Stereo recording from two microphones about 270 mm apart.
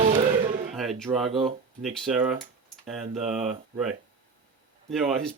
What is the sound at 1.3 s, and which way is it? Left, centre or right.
Speech, centre.